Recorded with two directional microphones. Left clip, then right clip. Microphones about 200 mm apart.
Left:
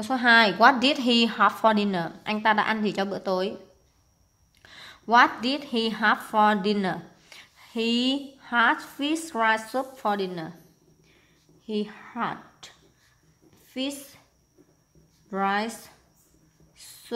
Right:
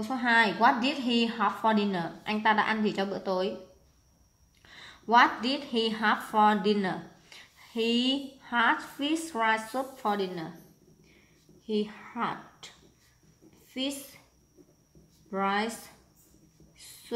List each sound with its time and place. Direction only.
0.0 s a woman's voice: 40° left (ahead or behind)
4.6 s a woman's voice: 40° left (ahead or behind)
11.6 s speech: 40° left (ahead or behind)
13.7 s a sound: 40° left (ahead or behind)
15.2 s a woman's voice: 40° left (ahead or behind)
16.7 s a sound: 40° left (ahead or behind)